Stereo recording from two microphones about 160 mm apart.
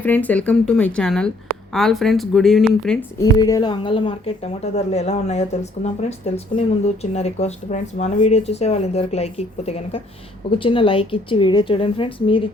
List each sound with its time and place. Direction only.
0.0 s a woman's voice: 10° left (ahead or behind)
3.3 s speech: 25° left (ahead or behind)